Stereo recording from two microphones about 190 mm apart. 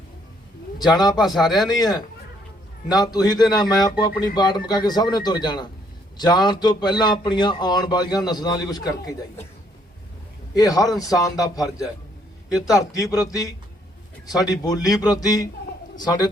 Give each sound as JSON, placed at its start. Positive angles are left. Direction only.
{"t": 0.8, "sound": "speech", "side_deg": 20}
{"t": 1.2, "sound": "speech", "side_deg": 0}
{"t": 1.6, "sound": "speech", "side_deg": 20}
{"t": 10.6, "sound": "speech", "side_deg": 20}
{"t": 14.3, "sound": "speech", "side_deg": 20}